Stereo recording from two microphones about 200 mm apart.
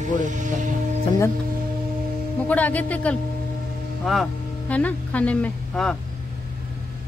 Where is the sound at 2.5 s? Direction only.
10° left (ahead or behind).